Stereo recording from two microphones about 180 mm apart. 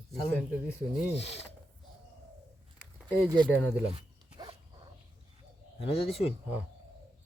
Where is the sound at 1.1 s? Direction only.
35° left (ahead or behind).